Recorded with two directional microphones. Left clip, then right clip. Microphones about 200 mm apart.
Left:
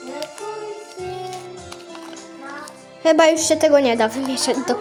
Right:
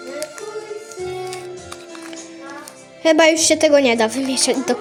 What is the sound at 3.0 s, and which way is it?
Speech, 10° right (ahead or behind).